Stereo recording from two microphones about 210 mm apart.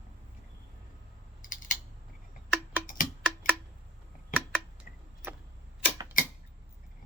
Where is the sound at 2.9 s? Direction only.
40° left (ahead or behind).